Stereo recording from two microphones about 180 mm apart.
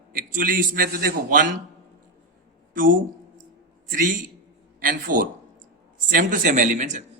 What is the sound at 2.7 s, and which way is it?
Speech, 50° right (ahead or behind).